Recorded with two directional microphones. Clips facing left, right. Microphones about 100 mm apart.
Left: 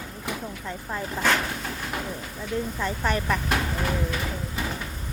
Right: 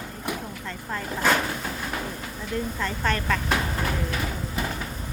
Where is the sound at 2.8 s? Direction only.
15° left (ahead or behind).